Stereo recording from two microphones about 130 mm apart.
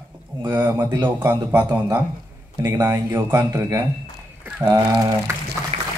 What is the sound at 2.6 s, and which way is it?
Speech, 25° right (ahead or behind).